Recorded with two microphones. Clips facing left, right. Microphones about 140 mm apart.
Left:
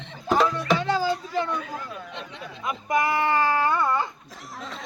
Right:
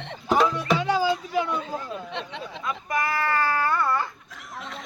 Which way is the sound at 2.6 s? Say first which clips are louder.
Left 4 dB; 20° left (ahead or behind).